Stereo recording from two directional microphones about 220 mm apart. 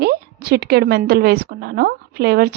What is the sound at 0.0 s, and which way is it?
A woman's voice, 45° right (ahead or behind).